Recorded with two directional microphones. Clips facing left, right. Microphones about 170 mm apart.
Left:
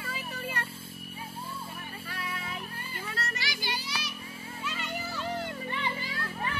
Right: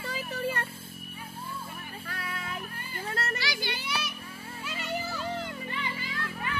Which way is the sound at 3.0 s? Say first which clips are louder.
Right 5 dB; 55° right (ahead or behind).